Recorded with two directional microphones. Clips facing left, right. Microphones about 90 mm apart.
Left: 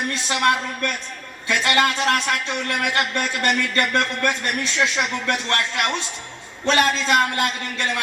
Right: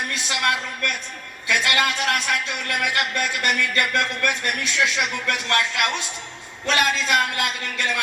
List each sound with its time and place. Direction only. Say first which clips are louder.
0.1 s a man's voice: left 5 dB; 25° left (ahead or behind)